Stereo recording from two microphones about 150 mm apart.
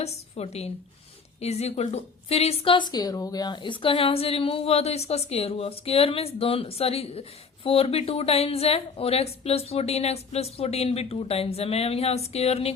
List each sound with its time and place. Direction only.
0.0 s a woman's voice: 45° left (ahead or behind)